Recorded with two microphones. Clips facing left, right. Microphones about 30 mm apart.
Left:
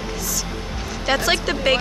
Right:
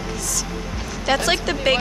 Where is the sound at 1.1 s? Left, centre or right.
Centre.